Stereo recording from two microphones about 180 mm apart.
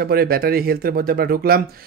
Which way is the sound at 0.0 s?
55° right (ahead or behind).